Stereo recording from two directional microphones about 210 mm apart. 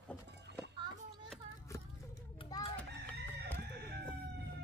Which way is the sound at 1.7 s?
15° left (ahead or behind).